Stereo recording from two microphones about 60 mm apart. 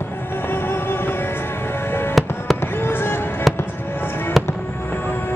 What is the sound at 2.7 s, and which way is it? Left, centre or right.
Fireworks, left.